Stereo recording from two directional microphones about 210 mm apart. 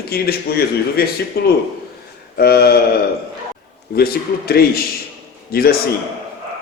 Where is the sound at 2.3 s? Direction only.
45° left (ahead or behind).